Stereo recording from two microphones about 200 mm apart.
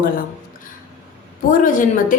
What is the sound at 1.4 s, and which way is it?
Speech, 40° left (ahead or behind).